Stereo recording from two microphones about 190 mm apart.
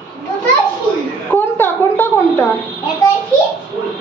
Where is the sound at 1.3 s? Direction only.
10° left (ahead or behind).